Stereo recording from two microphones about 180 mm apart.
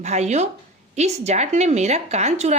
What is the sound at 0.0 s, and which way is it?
A woman's voice, 40° right (ahead or behind).